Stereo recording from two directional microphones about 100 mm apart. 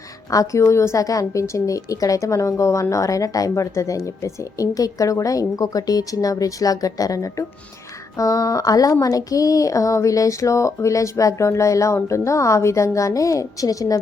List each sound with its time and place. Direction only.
0.3 s speech: 30° left (ahead or behind)